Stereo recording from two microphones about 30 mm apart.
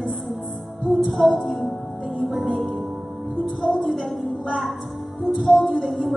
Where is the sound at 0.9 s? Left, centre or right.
Centre.